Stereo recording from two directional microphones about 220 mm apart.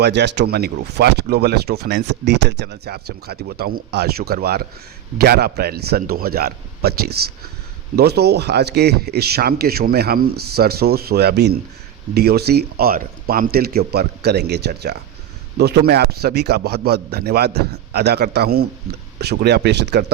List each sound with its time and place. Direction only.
0.0 s speech: 50° right (ahead or behind)